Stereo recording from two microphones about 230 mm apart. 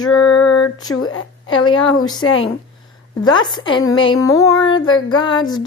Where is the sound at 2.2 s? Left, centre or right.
Left.